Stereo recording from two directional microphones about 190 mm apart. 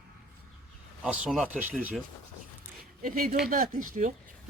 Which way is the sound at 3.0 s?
45° right (ahead or behind).